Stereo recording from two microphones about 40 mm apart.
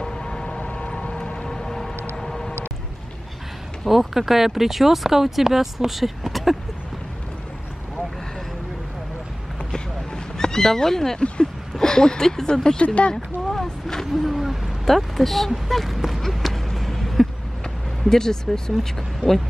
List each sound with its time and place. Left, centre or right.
0.0 s a sound: centre
1.4 s music: centre
2.1 s vehicle: centre
3.8 s speech: centre
9.7 s horse: centre
11.1 s speech: left
11.7 s speech: centre
12.8 s speech: left
13.1 s speech: centre
14.2 s a sound: centre
18.0 s speech: centre